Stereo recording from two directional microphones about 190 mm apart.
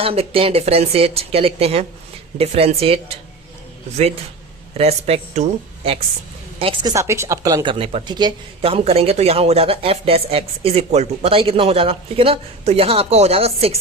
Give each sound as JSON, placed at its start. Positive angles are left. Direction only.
{"t": 0.0, "sound": "speech", "side_deg": -30}
{"t": 4.8, "sound": "a woman's voice", "side_deg": -30}
{"t": 6.9, "sound": "speech", "side_deg": -15}